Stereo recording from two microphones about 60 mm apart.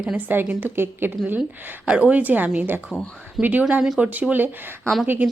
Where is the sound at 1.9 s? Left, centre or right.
Right.